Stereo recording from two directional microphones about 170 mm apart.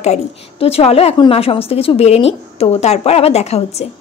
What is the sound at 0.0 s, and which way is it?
A woman's voice, 40° left (ahead or behind).